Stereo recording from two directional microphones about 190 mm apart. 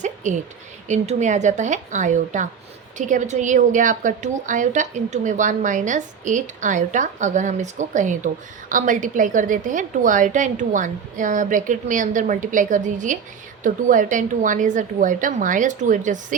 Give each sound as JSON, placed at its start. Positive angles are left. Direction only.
{"t": 0.2, "sound": "a woman's voice", "side_deg": -40}